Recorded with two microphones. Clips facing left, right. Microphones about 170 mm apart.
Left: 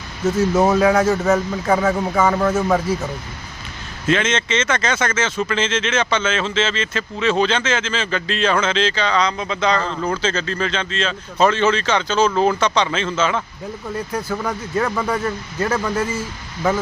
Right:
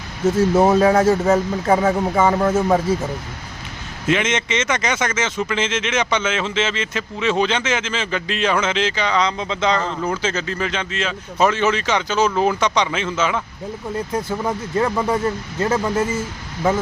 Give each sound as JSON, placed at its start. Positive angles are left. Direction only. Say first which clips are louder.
{"t": 0.3, "sound": "speech", "louder": "right 1 dB", "side_deg": -30}
{"t": 4.0, "sound": "speech", "louder": "left 1 dB", "side_deg": -15}